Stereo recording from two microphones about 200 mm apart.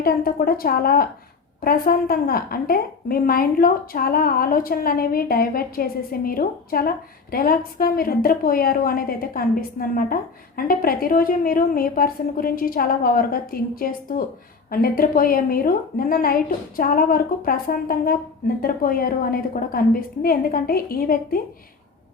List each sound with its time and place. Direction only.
0.0 s a woman's voice: 45° left (ahead or behind)